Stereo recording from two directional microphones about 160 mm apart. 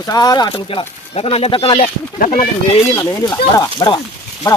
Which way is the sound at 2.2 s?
50° left (ahead or behind).